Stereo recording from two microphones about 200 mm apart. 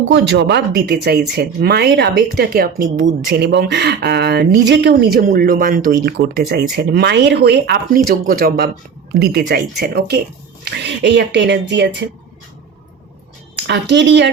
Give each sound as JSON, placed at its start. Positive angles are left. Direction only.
{"t": 0.1, "sound": "speech", "side_deg": -60}
{"t": 13.6, "sound": "speech", "side_deg": -60}